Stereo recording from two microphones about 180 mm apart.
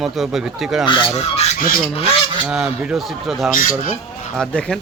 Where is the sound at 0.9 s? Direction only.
30° left (ahead or behind).